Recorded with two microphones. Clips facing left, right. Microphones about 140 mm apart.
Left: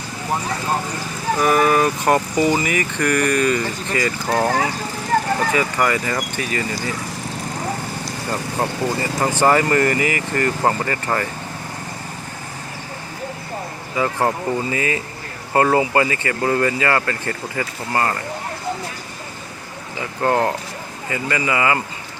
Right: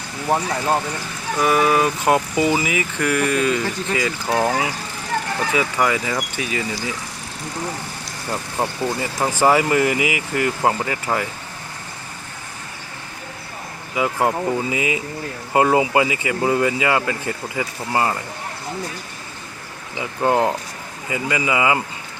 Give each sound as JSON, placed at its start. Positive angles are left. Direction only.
{"t": 1.4, "sound": "speech", "side_deg": 0}
{"t": 5.5, "sound": "speech", "side_deg": -5}
{"t": 8.3, "sound": "speech", "side_deg": -5}
{"t": 13.9, "sound": "speech", "side_deg": -10}
{"t": 20.0, "sound": "speech", "side_deg": -15}